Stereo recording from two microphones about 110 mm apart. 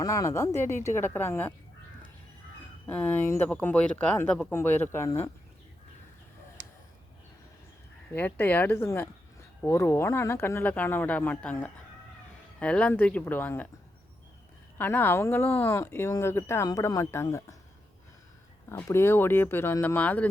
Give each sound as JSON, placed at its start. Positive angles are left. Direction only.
{"t": 0.0, "sound": "speech", "side_deg": 30}
{"t": 2.9, "sound": "speech", "side_deg": 15}
{"t": 8.1, "sound": "speech", "side_deg": 15}
{"t": 14.8, "sound": "speech", "side_deg": 20}
{"t": 18.7, "sound": "speech", "side_deg": 25}